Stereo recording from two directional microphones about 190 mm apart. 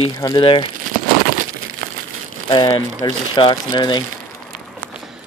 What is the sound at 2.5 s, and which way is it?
Speech, 20° left (ahead or behind).